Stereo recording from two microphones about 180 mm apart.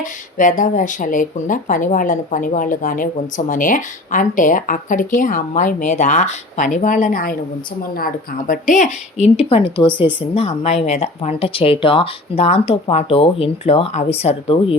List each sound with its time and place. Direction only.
0.0 s speech: 45° left (ahead or behind)